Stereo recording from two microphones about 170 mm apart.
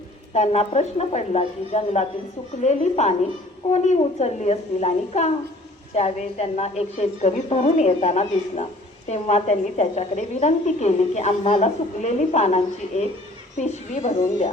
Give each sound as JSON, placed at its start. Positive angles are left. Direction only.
{"t": 0.3, "sound": "a woman's voice", "side_deg": 40}